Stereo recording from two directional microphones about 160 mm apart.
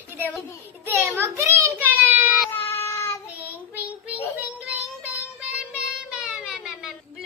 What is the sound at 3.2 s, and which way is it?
Child singing, 10° right (ahead or behind).